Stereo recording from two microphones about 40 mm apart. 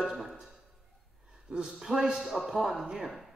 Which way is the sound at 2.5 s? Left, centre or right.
Centre.